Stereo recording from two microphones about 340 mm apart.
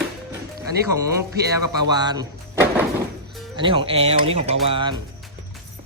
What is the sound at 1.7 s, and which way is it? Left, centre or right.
Speech, centre.